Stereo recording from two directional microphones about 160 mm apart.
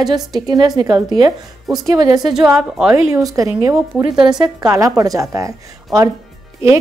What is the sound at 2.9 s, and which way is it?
A woman's voice, 20° right (ahead or behind).